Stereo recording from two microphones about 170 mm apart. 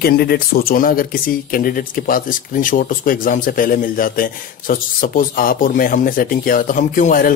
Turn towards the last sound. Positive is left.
turn(degrees=55)  # may be behind; listen again after turning